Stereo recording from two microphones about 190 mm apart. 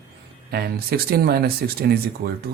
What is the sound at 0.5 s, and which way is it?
Speech, 55° right (ahead or behind).